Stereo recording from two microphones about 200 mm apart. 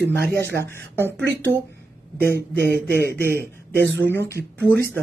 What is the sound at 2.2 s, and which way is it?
Speech, 55° right (ahead or behind).